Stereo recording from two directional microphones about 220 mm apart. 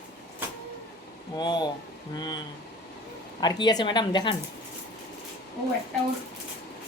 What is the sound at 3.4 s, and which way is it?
Speech, 20° left (ahead or behind).